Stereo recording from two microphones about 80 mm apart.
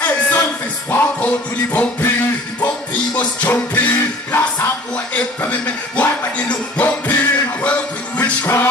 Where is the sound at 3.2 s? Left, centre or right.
Left.